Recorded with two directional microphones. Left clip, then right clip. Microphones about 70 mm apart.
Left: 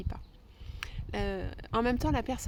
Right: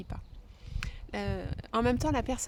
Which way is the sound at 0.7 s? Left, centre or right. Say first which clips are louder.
Left 1 dB; centre.